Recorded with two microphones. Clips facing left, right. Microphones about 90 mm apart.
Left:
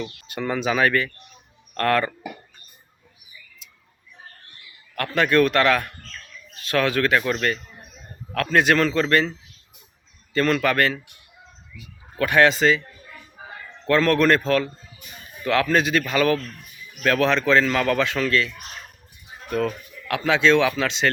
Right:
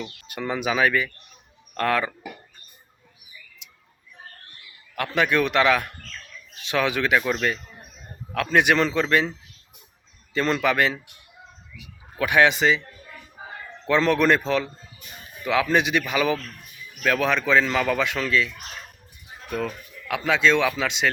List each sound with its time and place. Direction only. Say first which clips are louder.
0.0 s a man's voice: left 3 dB; centre (ahead or behind)
5.1 s a man's voice: left 3 dB; 15° right (ahead or behind)
7.2 s a man's voice: left 1 dB; 5° right (ahead or behind)
10.3 s a man's voice: left 2 dB; 15° right (ahead or behind)
12.1 s a man's voice: left 1 dB; 15° right (ahead or behind)
13.8 s a man's voice: left 1 dB; 15° right (ahead or behind)
19.5 s a man's voice: left 4 dB; 5° right (ahead or behind)